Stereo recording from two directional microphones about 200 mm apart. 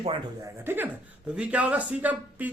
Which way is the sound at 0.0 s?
20° right (ahead or behind).